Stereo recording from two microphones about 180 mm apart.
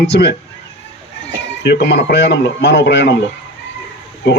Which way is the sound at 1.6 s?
75° left (ahead or behind).